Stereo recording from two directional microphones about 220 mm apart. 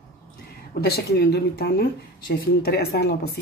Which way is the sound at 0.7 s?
45° left (ahead or behind).